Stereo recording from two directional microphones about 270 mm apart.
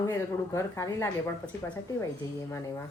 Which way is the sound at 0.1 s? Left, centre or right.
Centre.